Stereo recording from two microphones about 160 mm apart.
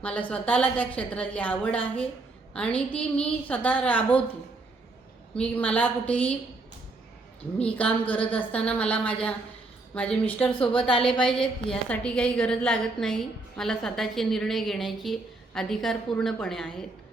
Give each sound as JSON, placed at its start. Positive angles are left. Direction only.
{"t": 0.0, "sound": "a woman's voice", "side_deg": 10}
{"t": 5.3, "sound": "a woman's voice", "side_deg": 10}
{"t": 7.6, "sound": "a woman's voice", "side_deg": 10}
{"t": 10.5, "sound": "a woman's voice", "side_deg": 30}
{"t": 11.0, "sound": "a woman's voice", "side_deg": 5}